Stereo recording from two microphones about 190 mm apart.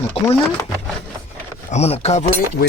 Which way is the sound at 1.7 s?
35° left (ahead or behind).